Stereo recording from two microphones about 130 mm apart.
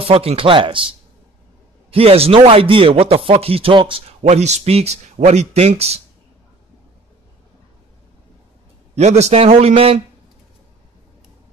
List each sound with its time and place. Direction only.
0.0 s speech: 45° right (ahead or behind)
4.2 s a man's voice: 55° right (ahead or behind)
8.9 s a man's voice: 60° right (ahead or behind)